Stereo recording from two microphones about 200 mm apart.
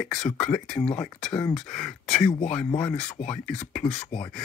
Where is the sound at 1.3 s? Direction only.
5° left (ahead or behind).